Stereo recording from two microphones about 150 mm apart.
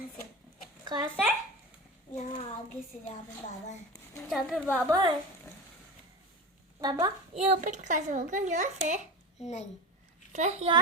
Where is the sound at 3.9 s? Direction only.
20° left (ahead or behind).